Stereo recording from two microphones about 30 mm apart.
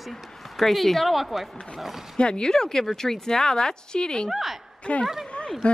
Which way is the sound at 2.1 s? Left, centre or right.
Left.